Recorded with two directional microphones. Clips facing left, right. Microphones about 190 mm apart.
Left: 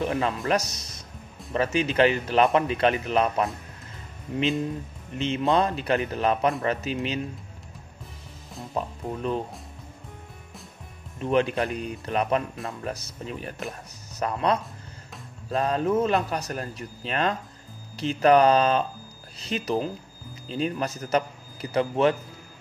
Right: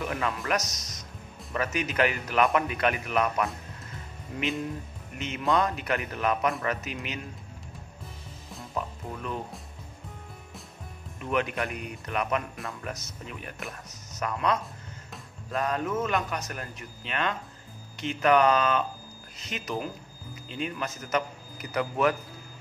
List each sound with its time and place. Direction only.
0.0 s a man's voice: 30° left (ahead or behind)
8.7 s a man's voice: 30° left (ahead or behind)
11.1 s a man's voice: 30° left (ahead or behind)